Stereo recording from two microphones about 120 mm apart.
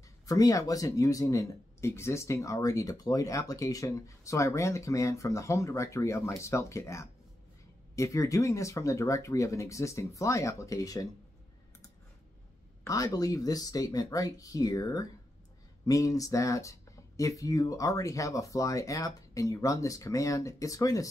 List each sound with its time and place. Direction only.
0.3 s speech: 30° left (ahead or behind)
12.8 s speech: 30° left (ahead or behind)